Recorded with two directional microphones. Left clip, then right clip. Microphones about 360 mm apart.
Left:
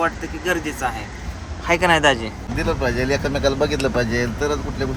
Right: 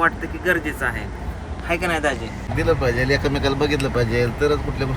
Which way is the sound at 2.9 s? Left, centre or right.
Centre.